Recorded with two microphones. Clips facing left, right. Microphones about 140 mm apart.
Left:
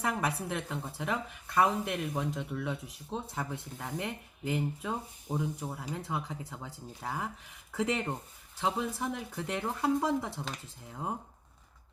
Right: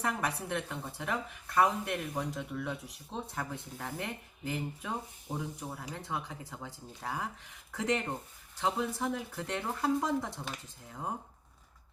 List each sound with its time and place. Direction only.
0.0 s speech: centre (ahead or behind)